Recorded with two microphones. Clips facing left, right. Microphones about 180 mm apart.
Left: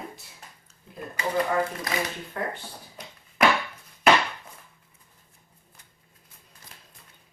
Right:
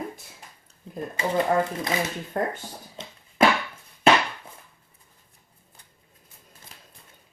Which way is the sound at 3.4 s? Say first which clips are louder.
Right 2 dB; 25° right (ahead or behind).